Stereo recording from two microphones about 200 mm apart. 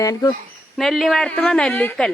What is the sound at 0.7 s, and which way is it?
Speech, centre (ahead or behind).